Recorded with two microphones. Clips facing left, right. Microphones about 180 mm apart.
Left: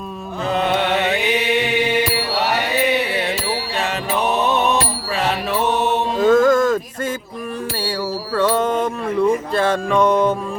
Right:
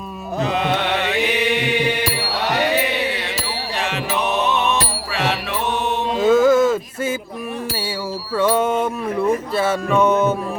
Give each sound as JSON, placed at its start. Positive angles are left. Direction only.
{"t": 0.5, "sound": "music", "side_deg": 40}
{"t": 4.4, "sound": "music", "side_deg": 35}
{"t": 5.7, "sound": "mantra", "side_deg": 40}
{"t": 6.1, "sound": "a sound", "side_deg": -10}
{"t": 8.4, "sound": "wind chime", "side_deg": -10}
{"t": 9.6, "sound": "music", "side_deg": -5}